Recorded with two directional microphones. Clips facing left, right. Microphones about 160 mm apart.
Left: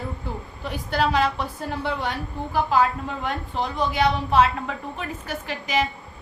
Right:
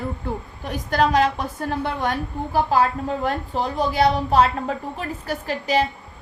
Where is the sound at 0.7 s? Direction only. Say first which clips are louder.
Right 3 dB; 45° right (ahead or behind).